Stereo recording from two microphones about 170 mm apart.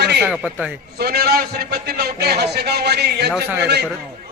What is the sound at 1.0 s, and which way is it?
Speech, 65° right (ahead or behind).